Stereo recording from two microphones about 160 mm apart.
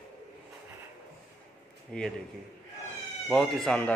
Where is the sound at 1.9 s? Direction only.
5° left (ahead or behind).